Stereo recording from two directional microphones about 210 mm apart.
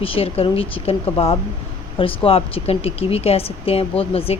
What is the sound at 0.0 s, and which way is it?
Speech, 25° left (ahead or behind).